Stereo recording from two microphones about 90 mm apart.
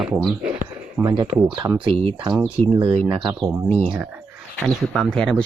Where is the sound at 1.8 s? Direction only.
90° right.